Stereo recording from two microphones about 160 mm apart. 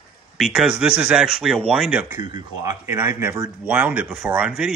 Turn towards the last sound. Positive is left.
turn(degrees=-5)  # may be behind; listen again after turning